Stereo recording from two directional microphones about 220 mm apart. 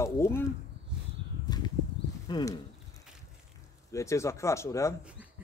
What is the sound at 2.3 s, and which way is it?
Speech, 20° left (ahead or behind).